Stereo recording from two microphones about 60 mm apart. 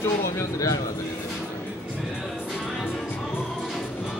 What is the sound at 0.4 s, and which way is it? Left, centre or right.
Speech, left.